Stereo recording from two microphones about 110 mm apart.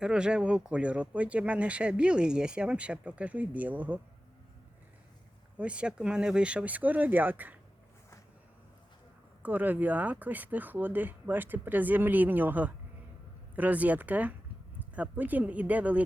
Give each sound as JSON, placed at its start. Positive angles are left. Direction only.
{"t": 0.0, "sound": "speech", "side_deg": -10}
{"t": 5.5, "sound": "speech", "side_deg": -10}
{"t": 9.4, "sound": "speech", "side_deg": -15}